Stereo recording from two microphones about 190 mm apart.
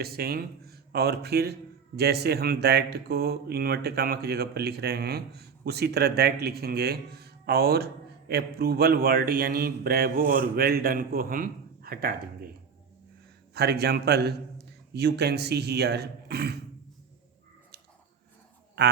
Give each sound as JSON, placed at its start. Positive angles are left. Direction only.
{"t": 0.0, "sound": "speech", "side_deg": -55}
{"t": 13.5, "sound": "speech", "side_deg": -60}